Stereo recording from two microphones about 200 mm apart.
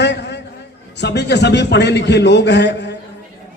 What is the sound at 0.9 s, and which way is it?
A man's voice, 60° left (ahead or behind).